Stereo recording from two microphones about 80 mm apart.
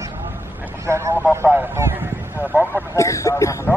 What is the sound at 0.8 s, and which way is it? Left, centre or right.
Speech, right.